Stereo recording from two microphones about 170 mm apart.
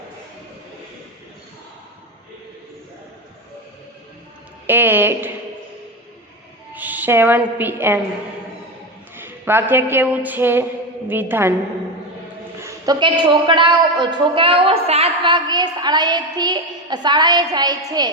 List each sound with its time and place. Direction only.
4.6 s speech: 10° right (ahead or behind)
6.7 s a woman's voice: 10° right (ahead or behind)
9.1 s a woman's voice: 15° right (ahead or behind)
12.6 s a woman's voice: 20° right (ahead or behind)